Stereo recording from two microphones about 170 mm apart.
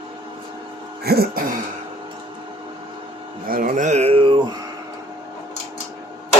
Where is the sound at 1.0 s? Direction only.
65° right (ahead or behind).